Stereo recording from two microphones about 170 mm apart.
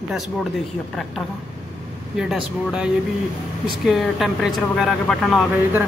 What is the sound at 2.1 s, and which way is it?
A woman's voice, 5° right (ahead or behind).